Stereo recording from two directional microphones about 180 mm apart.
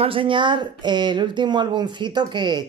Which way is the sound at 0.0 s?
30° right (ahead or behind).